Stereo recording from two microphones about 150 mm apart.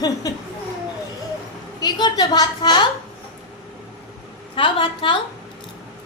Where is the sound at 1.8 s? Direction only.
25° left (ahead or behind).